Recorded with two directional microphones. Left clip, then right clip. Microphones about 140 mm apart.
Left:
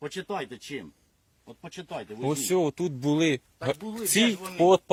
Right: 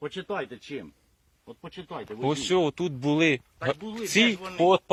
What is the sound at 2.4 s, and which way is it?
Speech, 30° left (ahead or behind).